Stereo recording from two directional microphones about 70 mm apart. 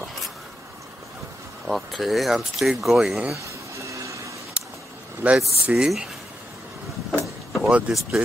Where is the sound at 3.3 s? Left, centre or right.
Right.